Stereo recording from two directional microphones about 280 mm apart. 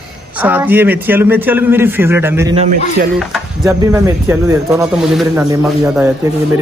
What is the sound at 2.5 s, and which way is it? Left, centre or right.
Speech, right.